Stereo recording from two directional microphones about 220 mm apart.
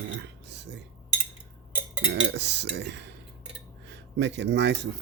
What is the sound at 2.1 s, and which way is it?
Cutlery, 50° right (ahead or behind).